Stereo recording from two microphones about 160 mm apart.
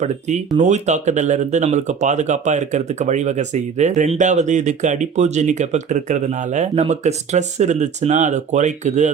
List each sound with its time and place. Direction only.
0.0 s speech: 45° right (ahead or behind)